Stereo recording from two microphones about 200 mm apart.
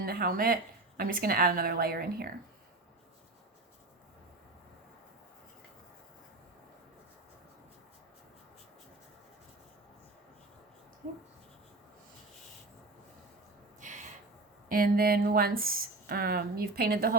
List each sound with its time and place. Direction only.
0.0 s speech: 50° right (ahead or behind)
13.8 s a sound: 40° right (ahead or behind)
14.7 s speech: 50° right (ahead or behind)